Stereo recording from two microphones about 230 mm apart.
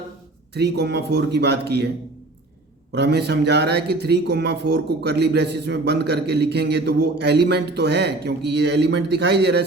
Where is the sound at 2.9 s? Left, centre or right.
Right.